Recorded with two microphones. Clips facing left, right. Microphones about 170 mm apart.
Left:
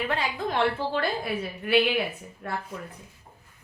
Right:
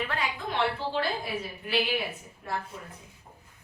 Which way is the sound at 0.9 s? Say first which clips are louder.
Left 3 dB; 60° left (ahead or behind).